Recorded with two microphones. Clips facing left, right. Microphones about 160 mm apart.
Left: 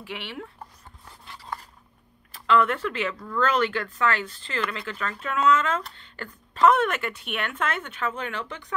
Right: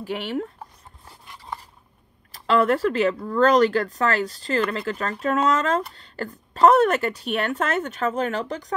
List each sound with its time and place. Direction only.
0.0 s speech: 40° right (ahead or behind)
1.2 s a sound: 20° right (ahead or behind)
2.3 s speech: 40° right (ahead or behind)